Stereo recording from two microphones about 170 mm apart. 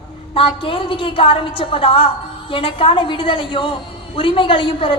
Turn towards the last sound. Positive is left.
turn(degrees=30)  # may be behind; listen again after turning